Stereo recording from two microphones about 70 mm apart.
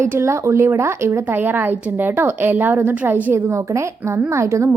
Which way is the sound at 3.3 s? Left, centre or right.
Right.